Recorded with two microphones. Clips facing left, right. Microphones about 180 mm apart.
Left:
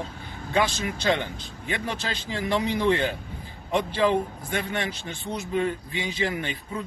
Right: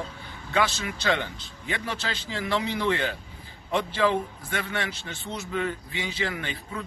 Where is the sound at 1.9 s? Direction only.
45° left (ahead or behind).